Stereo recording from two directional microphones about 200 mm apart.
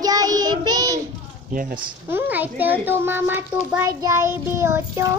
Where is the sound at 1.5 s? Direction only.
45° right (ahead or behind).